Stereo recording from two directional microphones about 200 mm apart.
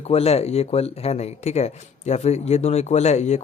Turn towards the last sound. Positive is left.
turn(degrees=35)  # may be behind; listen again after turning